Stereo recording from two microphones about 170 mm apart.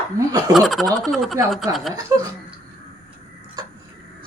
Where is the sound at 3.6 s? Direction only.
25° right (ahead or behind).